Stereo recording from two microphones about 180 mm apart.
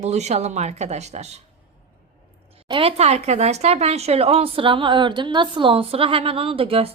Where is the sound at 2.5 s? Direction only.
30° right (ahead or behind).